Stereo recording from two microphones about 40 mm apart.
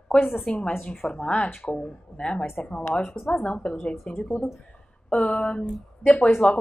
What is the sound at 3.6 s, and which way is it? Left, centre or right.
Speech, left.